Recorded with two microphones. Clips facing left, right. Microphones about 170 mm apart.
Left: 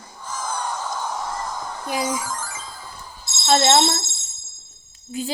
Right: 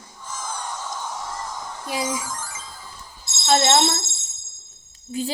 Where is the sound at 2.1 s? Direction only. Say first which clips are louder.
Left 2 dB; 60° left (ahead or behind).